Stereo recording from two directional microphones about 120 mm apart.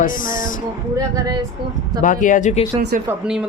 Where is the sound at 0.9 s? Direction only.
30° right (ahead or behind).